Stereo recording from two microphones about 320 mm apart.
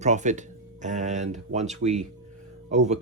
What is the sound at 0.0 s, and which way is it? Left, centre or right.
Speech, right.